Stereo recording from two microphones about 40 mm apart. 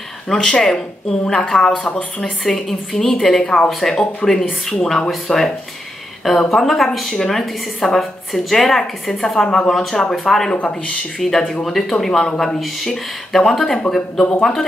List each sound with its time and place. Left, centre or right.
0.3 s a woman's voice: centre
6.5 s a woman's voice: centre
10.6 s speech: left
11.1 s a woman's voice: centre